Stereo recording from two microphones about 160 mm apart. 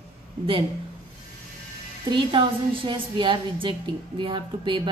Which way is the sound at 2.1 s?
30° right (ahead or behind).